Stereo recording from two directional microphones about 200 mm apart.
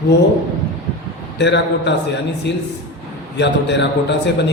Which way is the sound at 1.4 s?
60° left (ahead or behind).